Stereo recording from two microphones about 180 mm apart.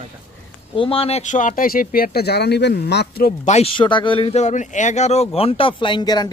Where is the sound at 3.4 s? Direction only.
35° left (ahead or behind).